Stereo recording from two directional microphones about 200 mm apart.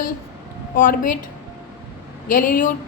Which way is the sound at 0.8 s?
45° left (ahead or behind).